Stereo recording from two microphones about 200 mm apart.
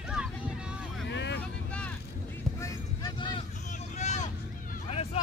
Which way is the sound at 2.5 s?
20° left (ahead or behind).